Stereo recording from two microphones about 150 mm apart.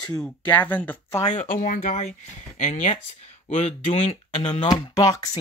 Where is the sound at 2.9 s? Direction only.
45° left (ahead or behind).